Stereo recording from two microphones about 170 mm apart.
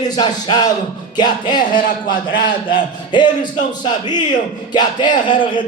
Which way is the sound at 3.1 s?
25° left (ahead or behind).